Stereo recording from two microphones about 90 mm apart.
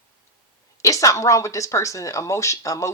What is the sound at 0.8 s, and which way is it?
Speech, 35° left (ahead or behind).